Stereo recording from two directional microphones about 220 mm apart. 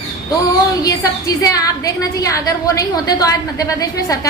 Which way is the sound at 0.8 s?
15° left (ahead or behind).